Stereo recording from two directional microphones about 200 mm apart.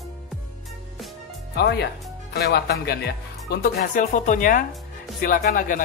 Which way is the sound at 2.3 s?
50° left (ahead or behind).